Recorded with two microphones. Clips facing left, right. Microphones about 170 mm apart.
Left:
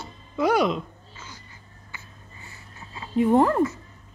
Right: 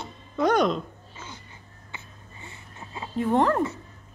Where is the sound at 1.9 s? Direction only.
25° right (ahead or behind).